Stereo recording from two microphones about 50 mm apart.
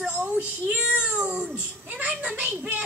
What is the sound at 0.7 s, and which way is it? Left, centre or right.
Cat, right.